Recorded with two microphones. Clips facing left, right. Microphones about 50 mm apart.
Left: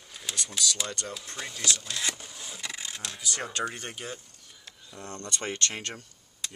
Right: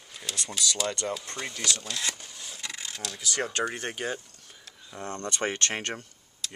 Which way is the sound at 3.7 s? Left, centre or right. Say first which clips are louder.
Right 6 dB; right.